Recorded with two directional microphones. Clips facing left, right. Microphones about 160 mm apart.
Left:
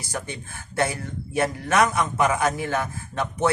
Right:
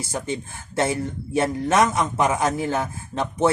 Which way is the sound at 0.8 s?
25° right (ahead or behind).